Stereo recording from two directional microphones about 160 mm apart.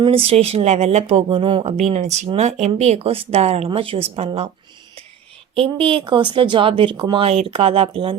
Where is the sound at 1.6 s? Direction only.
45° right (ahead or behind).